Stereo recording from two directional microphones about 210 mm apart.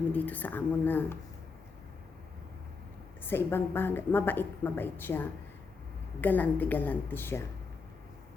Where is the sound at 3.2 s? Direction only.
10° left (ahead or behind).